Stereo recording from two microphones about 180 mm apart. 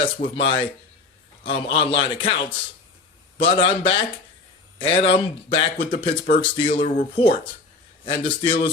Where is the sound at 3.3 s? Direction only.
30° left (ahead or behind).